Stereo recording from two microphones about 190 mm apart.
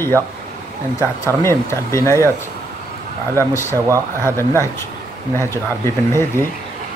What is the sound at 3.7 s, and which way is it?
Speech, 15° right (ahead or behind).